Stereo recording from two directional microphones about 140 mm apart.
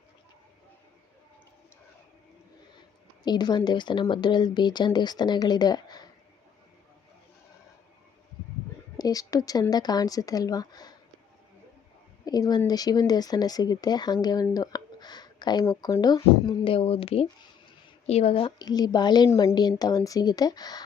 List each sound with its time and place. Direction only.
3.2 s speech: 30° left (ahead or behind)
9.0 s speech: 25° left (ahead or behind)
12.2 s speech: 30° left (ahead or behind)
14.5 s a sound: 30° left (ahead or behind)
15.7 s speech: 30° left (ahead or behind)
18.7 s speech: 30° left (ahead or behind)